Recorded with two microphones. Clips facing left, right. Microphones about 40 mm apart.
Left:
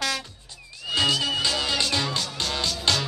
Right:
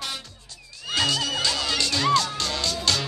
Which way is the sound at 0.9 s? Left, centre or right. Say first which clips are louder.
Left 1 dB; centre.